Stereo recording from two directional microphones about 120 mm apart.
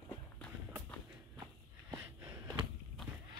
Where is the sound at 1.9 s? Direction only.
25° right (ahead or behind).